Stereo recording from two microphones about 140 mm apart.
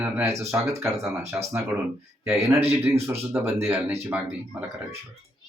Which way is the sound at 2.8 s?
15° right (ahead or behind).